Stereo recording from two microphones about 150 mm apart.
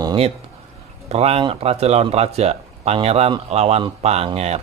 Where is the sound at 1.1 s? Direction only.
40° right (ahead or behind).